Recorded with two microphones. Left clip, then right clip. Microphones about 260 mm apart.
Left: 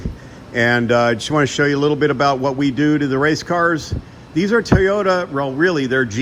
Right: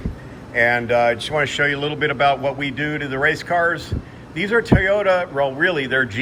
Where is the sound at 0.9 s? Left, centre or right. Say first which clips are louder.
Left 2 dB; left.